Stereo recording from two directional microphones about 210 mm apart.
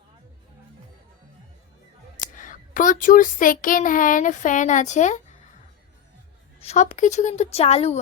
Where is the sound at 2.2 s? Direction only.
40° left (ahead or behind).